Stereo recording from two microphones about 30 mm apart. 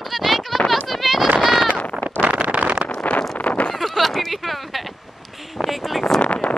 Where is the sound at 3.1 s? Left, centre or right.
Left.